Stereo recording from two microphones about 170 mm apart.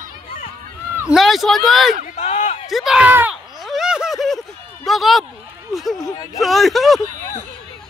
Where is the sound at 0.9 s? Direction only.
5° right (ahead or behind).